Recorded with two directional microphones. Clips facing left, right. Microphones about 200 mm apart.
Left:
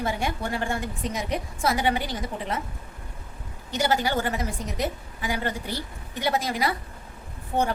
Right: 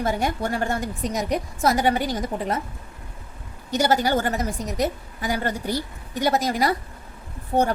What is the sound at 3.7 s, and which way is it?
A woman's voice, 40° right (ahead or behind).